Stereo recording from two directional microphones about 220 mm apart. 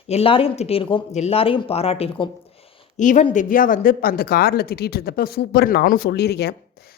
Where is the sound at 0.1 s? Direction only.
25° left (ahead or behind).